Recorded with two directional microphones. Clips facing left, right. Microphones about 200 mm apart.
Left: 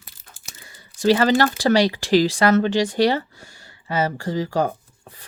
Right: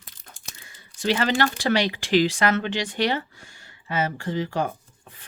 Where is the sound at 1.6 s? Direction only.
40° left (ahead or behind).